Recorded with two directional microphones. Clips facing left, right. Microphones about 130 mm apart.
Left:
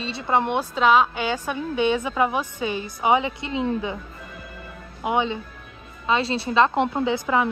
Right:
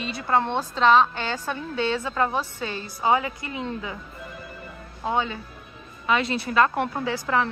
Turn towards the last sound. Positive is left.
turn(degrees=15)  # may be behind; listen again after turning